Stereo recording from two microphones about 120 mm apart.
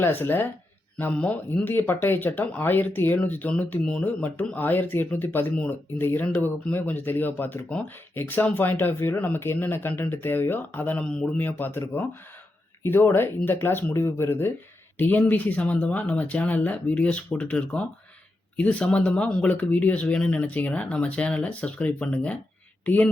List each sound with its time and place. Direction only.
0.0 s speech: 20° left (ahead or behind)